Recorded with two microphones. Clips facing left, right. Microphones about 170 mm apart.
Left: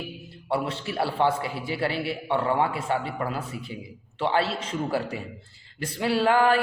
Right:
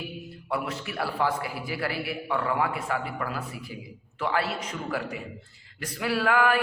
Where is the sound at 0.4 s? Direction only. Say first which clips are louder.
Left 4 dB; 30° left (ahead or behind).